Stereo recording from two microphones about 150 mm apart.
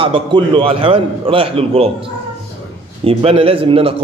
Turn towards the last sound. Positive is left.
turn(degrees=-35)  # may be behind; listen again after turning